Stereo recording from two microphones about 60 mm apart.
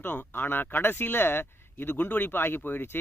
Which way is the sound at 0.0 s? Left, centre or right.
Left.